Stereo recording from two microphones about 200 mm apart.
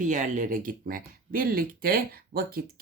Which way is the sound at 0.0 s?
40° right (ahead or behind).